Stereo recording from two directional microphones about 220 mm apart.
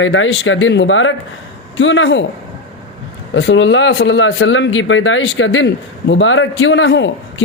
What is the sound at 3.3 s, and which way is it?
Speech, 55° left (ahead or behind).